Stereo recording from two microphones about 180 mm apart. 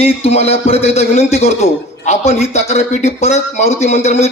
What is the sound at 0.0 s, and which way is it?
A man's voice, 35° left (ahead or behind).